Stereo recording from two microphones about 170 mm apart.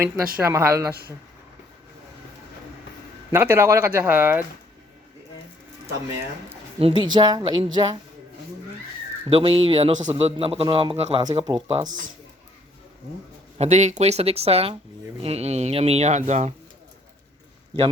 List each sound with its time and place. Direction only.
0.3 s speech: 15° right (ahead or behind)
3.3 s speech: 15° right (ahead or behind)
6.7 s speech: 30° right (ahead or behind)
9.3 s speech: 35° right (ahead or behind)
13.6 s speech: 45° right (ahead or behind)